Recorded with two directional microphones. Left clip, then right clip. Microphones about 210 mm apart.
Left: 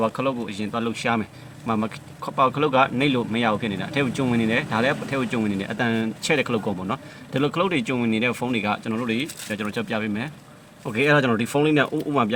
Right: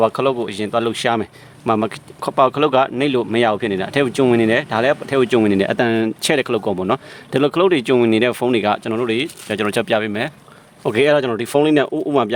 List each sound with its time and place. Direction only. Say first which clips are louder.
0.0 s speech: right 8 dB; 55° right (ahead or behind)